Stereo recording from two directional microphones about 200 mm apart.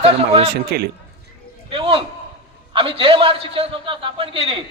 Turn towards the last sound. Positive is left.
turn(degrees=-25)  # may be behind; listen again after turning